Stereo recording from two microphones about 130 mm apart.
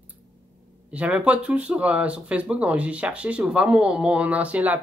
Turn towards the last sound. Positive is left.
turn(degrees=-10)  # may be behind; listen again after turning